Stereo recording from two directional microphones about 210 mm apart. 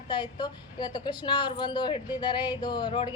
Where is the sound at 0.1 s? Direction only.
20° left (ahead or behind).